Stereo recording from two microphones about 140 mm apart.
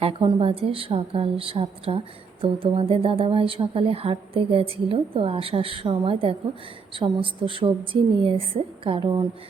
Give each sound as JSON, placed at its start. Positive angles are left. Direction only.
{"t": 0.0, "sound": "speech", "side_deg": -40}